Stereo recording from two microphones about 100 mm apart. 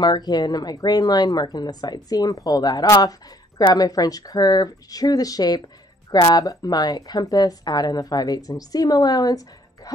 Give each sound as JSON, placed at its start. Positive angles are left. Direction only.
{"t": 0.0, "sound": "speech", "side_deg": 45}